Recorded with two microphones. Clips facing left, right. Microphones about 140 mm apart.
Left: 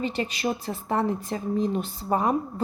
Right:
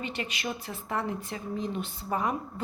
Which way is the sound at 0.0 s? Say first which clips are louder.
Left 7 dB; 35° left (ahead or behind).